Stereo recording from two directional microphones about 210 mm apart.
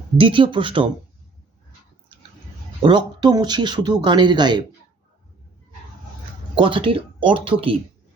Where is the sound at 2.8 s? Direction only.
20° right (ahead or behind).